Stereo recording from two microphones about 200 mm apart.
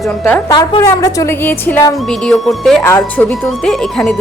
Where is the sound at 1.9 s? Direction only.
Centre (ahead or behind).